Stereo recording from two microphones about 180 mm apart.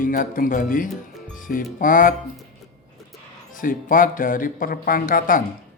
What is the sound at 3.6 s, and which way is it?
Speech, 50° left (ahead or behind).